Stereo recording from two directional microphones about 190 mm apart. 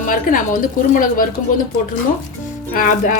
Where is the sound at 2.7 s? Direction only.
45° left (ahead or behind).